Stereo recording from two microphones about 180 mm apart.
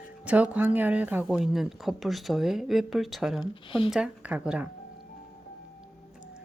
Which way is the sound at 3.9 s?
5° right (ahead or behind).